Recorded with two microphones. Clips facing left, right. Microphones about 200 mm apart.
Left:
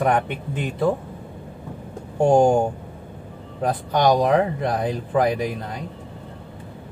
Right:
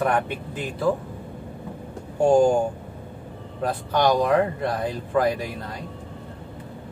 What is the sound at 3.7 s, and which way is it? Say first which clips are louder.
Speech: left 2 dB; 15° left (ahead or behind).